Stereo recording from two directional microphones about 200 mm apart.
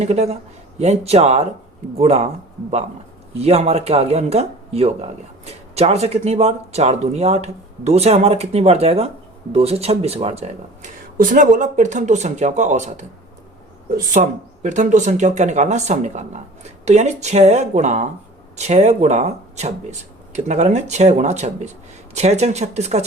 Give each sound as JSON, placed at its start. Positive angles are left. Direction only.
{"t": 0.0, "sound": "speech", "side_deg": -30}